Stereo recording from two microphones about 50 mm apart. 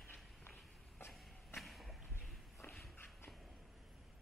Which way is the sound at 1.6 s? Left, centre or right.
Centre.